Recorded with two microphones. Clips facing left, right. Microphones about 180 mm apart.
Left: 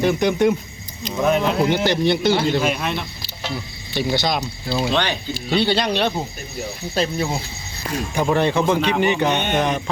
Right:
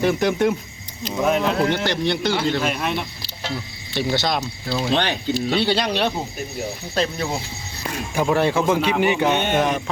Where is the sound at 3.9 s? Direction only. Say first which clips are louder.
Left 1 dB; centre (ahead or behind).